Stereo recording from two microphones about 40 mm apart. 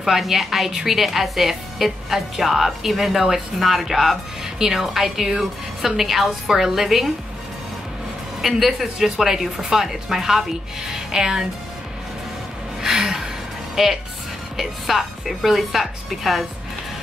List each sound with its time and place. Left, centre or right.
0.2 s a woman's voice: centre
8.4 s a woman's voice: centre
12.8 s gasp: centre
13.8 s a woman's voice: centre